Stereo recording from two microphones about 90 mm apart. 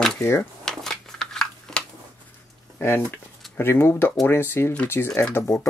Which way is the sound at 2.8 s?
25° left (ahead or behind).